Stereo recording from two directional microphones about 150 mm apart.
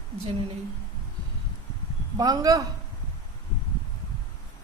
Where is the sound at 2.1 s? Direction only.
25° right (ahead or behind).